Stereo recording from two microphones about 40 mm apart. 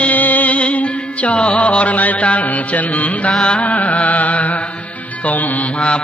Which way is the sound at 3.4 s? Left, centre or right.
Left.